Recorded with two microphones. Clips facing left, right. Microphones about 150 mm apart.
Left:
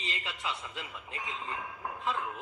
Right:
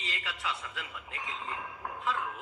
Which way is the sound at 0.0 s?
20° left (ahead or behind).